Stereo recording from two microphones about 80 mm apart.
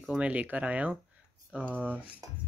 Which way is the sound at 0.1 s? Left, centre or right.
Centre.